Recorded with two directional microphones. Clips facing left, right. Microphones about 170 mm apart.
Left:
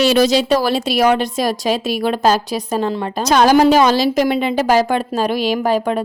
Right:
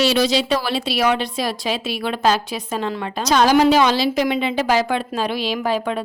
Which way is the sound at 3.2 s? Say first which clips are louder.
Left 3 dB; 50° left (ahead or behind).